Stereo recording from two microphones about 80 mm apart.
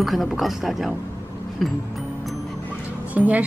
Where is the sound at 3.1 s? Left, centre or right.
Centre.